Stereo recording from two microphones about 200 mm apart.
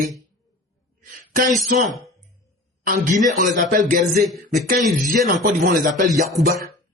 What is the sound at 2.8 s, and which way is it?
Speech, 45° right (ahead or behind).